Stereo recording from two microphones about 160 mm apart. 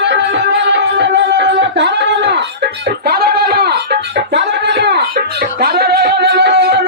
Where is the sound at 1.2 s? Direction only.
90° right.